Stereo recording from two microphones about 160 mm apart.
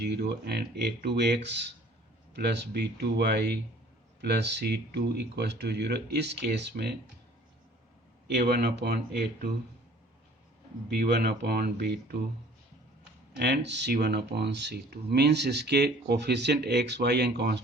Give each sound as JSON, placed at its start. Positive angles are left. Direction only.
{"t": 0.0, "sound": "speech", "side_deg": -90}
{"t": 8.3, "sound": "speech", "side_deg": -90}
{"t": 10.8, "sound": "speech", "side_deg": -90}
{"t": 13.3, "sound": "speech", "side_deg": -90}